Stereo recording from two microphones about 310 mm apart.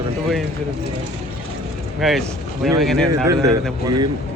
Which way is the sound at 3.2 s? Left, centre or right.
Centre.